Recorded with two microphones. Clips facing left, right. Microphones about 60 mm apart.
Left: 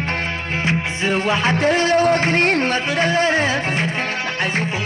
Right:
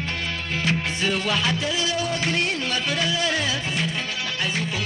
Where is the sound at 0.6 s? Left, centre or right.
Left.